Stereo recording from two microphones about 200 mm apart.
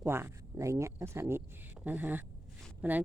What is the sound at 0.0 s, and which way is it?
Speech, 10° right (ahead or behind).